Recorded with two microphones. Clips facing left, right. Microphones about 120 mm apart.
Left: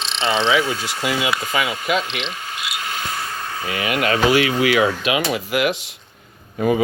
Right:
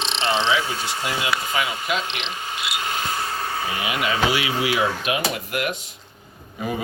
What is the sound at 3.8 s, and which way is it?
Speech, 55° left (ahead or behind).